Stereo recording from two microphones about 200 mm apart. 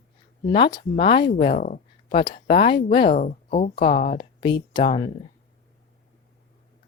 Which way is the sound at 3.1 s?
40° left (ahead or behind).